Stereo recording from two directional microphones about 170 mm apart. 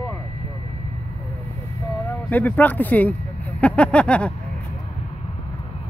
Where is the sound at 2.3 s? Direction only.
10° left (ahead or behind).